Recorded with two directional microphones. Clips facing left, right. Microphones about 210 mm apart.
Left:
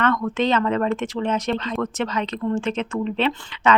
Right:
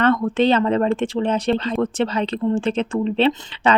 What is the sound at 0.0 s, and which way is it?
Speech, 30° right (ahead or behind).